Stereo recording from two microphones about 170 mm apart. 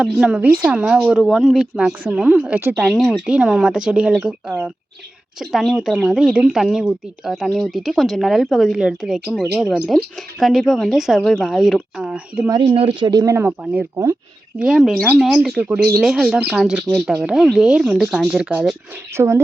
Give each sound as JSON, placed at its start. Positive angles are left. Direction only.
{"t": 0.0, "sound": "a woman's voice", "side_deg": -5}
{"t": 2.8, "sound": "a woman's voice", "side_deg": 0}
{"t": 12.6, "sound": "speech", "side_deg": -35}
{"t": 14.6, "sound": "a woman's voice", "side_deg": -5}
{"t": 19.1, "sound": "speech", "side_deg": -15}